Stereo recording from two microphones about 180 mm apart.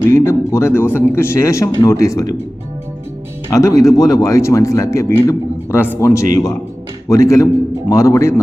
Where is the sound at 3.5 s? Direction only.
20° left (ahead or behind).